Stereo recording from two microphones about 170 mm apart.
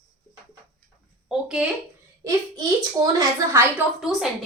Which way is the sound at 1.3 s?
5° right (ahead or behind).